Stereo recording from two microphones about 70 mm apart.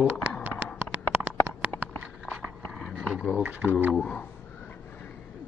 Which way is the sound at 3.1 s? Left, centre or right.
Centre.